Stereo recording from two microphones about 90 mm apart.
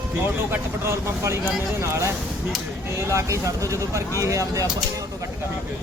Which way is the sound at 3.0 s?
35° right (ahead or behind).